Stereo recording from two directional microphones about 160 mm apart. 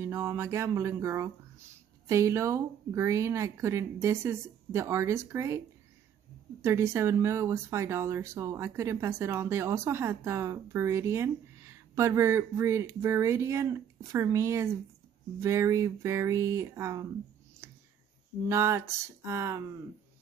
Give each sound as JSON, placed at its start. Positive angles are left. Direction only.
{"t": 0.0, "sound": "speech", "side_deg": -15}
{"t": 6.6, "sound": "speech", "side_deg": -15}
{"t": 17.6, "sound": "a sound", "side_deg": -15}
{"t": 18.5, "sound": "speech", "side_deg": -15}